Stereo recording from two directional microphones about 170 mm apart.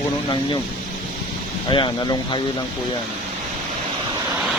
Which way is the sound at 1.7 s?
30° left (ahead or behind).